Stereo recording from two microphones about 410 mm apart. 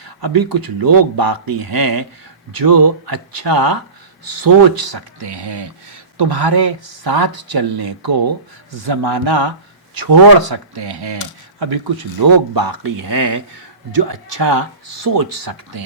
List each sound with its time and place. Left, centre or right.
0.0 s speech: right
12.2 s speech: right